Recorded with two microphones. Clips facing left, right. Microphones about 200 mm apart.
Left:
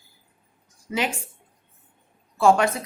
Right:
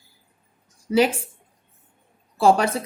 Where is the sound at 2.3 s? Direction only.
35° right (ahead or behind).